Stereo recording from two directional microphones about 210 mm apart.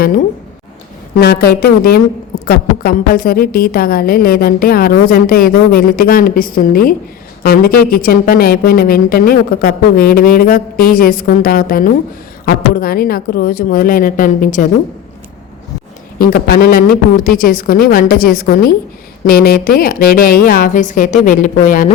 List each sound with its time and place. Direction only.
1.2 s a woman's voice: 50° left (ahead or behind)
16.1 s a woman's voice: 45° left (ahead or behind)